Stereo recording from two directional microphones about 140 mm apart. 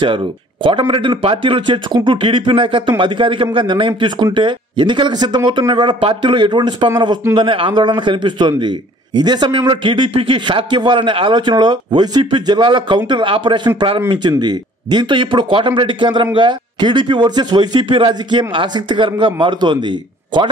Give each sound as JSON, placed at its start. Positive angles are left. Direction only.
{"t": 0.0, "sound": "a man's voice", "side_deg": -35}